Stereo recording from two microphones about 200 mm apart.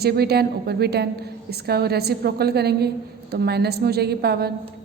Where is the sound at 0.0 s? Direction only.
55° right (ahead or behind).